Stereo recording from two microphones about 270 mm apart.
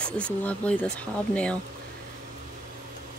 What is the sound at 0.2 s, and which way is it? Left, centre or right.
Speech, centre.